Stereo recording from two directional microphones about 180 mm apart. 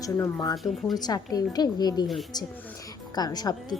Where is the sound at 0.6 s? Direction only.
Centre (ahead or behind).